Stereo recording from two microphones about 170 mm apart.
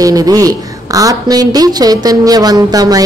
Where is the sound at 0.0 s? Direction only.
20° right (ahead or behind).